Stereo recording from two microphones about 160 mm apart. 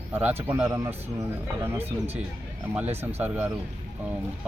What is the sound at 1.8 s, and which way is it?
Speech, 40° right (ahead or behind).